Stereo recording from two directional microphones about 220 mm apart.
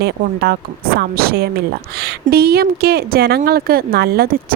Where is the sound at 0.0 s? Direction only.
45° right (ahead or behind).